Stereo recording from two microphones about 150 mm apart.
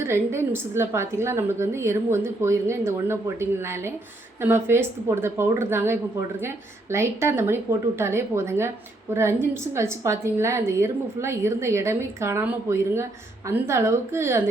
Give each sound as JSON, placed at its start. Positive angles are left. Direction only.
{"t": 0.0, "sound": "a woman's voice", "side_deg": -15}